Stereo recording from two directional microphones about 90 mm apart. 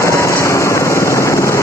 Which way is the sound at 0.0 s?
35° left (ahead or behind).